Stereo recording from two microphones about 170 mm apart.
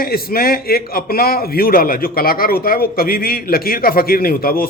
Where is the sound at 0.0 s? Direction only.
60° left (ahead or behind).